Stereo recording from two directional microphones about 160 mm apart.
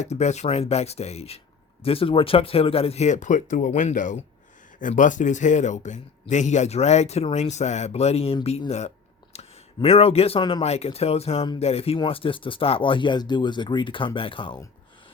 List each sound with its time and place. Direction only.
0.0 s a man's voice: 45° left (ahead or behind)